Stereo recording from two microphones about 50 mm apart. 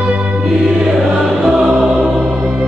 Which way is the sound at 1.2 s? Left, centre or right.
Centre.